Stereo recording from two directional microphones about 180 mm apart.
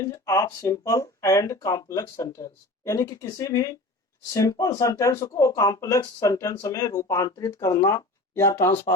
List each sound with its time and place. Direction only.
0.0 s speech: 15° left (ahead or behind)